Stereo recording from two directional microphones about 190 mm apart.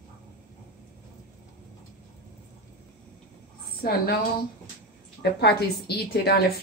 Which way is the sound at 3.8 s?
50° left (ahead or behind).